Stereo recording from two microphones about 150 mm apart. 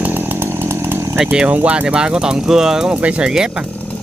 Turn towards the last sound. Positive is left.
turn(degrees=-5)  # may be behind; listen again after turning